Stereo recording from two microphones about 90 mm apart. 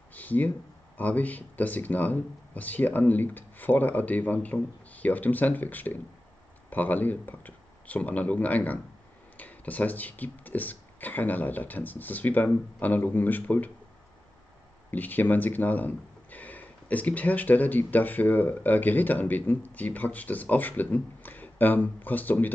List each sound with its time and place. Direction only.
0.1 s a sound: 20° left (ahead or behind)
0.9 s speech: 20° left (ahead or behind)
14.9 s speech: 20° left (ahead or behind)